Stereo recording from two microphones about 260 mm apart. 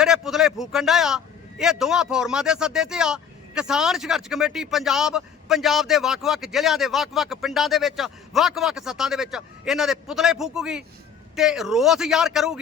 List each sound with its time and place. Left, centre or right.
0.0 s a man's voice: centre